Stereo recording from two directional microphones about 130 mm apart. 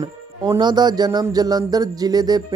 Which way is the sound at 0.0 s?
30° right (ahead or behind).